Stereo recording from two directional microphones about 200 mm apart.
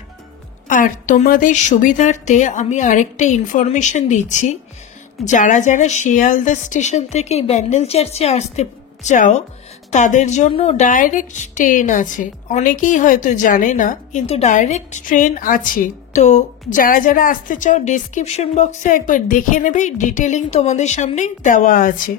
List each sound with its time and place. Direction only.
0.7 s a woman's voice: 40° left (ahead or behind)